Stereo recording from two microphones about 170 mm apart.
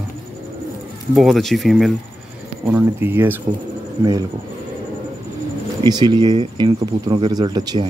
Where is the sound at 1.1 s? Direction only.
Centre (ahead or behind).